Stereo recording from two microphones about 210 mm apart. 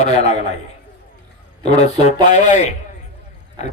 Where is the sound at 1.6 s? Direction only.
30° left (ahead or behind).